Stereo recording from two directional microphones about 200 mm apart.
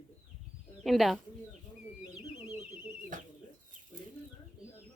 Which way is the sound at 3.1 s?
40° right (ahead or behind).